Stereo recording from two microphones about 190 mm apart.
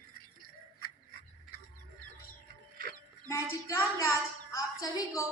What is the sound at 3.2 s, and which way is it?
Speech, 15° left (ahead or behind).